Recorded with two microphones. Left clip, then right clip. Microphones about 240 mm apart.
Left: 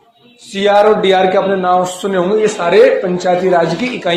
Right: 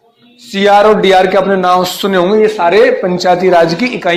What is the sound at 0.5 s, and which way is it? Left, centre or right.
A man's voice, right.